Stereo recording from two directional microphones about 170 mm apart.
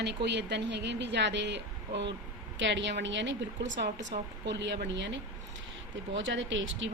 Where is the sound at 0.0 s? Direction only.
85° right.